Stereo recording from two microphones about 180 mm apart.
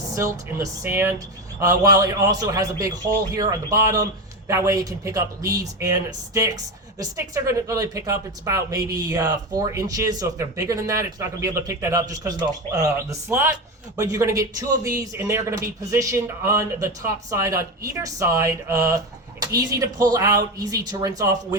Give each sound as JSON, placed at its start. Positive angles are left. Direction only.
{"t": 0.2, "sound": "speech", "side_deg": -15}